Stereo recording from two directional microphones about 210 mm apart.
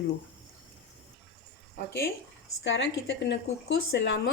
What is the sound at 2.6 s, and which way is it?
Speech, 60° left (ahead or behind).